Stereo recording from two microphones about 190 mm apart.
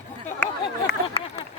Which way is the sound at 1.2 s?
30° left (ahead or behind).